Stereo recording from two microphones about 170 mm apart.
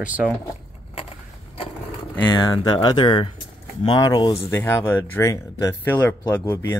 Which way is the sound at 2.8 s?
25° left (ahead or behind).